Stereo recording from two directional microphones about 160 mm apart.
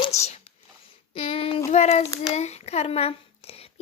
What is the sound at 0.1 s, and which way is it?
Whispering, 45° left (ahead or behind).